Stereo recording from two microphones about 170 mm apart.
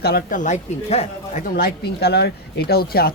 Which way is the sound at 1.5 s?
70° left (ahead or behind).